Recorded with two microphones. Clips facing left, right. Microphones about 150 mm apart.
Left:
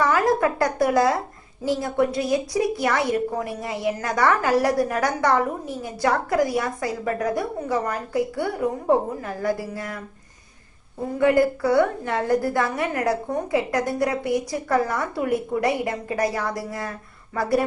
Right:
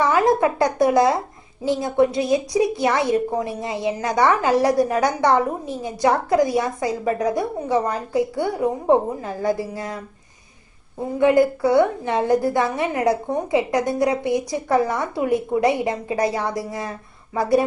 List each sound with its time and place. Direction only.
0.0 s a woman's voice: 20° right (ahead or behind)
11.2 s a woman's voice: 20° right (ahead or behind)